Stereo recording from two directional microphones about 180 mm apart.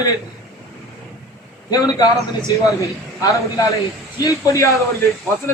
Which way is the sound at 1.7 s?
20° left (ahead or behind).